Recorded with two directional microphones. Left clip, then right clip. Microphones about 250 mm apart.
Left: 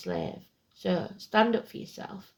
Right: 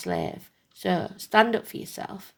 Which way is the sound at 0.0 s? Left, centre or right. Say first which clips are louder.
Right 4 dB; right.